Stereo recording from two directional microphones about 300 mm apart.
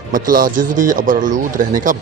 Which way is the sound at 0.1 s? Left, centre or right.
Right.